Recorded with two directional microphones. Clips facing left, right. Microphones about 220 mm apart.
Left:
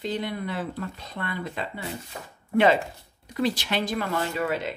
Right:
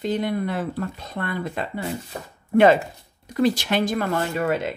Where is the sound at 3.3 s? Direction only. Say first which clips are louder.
Right 5 dB; 45° right (ahead or behind).